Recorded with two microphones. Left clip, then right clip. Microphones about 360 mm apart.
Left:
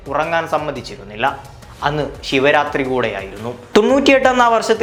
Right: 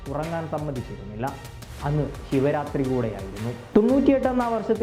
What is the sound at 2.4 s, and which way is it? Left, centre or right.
Speech, centre.